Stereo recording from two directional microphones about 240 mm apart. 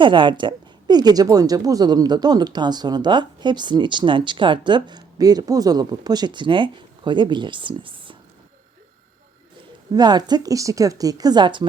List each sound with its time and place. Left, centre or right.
0.0 s a woman's voice: centre
9.9 s a woman's voice: centre